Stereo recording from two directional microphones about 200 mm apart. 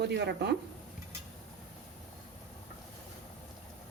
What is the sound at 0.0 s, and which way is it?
Speech, 55° right (ahead or behind).